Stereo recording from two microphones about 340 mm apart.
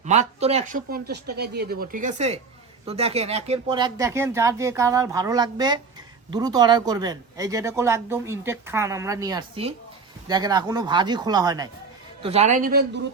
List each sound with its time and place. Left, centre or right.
0.0 s speech: centre